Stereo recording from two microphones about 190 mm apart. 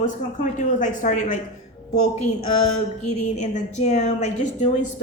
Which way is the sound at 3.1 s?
35° left (ahead or behind).